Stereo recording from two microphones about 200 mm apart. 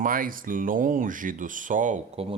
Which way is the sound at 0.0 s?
45° right (ahead or behind).